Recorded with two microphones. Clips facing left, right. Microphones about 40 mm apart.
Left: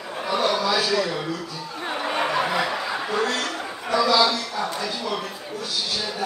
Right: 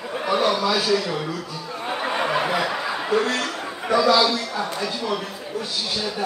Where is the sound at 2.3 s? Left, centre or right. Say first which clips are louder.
Right 1 dB; centre.